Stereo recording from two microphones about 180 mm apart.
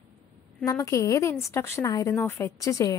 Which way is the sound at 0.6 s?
20° left (ahead or behind).